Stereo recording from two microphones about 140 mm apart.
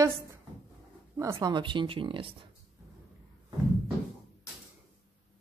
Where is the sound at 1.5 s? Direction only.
35° right (ahead or behind).